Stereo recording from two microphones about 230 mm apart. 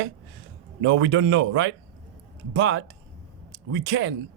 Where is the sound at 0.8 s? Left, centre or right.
Right.